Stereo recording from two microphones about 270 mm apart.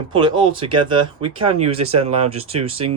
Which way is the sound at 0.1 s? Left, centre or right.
Centre.